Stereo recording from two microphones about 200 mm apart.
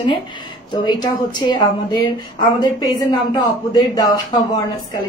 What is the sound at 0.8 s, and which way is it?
A woman's voice, 20° left (ahead or behind).